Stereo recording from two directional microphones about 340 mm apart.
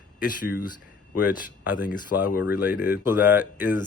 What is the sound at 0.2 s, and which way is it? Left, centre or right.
Speech, left.